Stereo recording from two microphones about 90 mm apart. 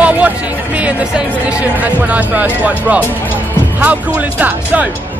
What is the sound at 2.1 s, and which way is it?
Speech, 15° right (ahead or behind).